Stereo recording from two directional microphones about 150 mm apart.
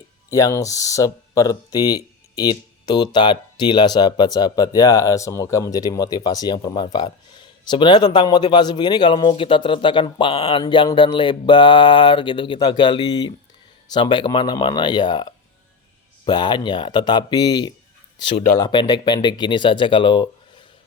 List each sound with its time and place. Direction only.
0.3 s speech: 20° left (ahead or behind)